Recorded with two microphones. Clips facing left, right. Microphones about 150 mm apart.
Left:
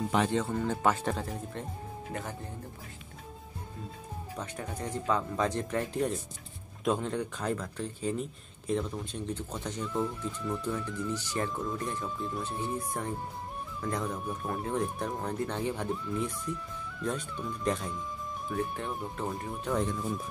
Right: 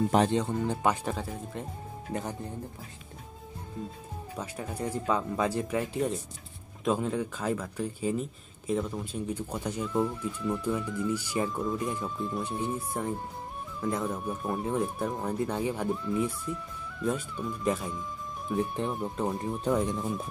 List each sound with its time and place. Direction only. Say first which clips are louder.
0.3 s speech: right 2 dB; 15° right (ahead or behind)
1.0 s speech: even; centre (ahead or behind)
4.4 s speech: right 3 dB; 10° right (ahead or behind)
18.5 s speech: right 4 dB; 15° right (ahead or behind)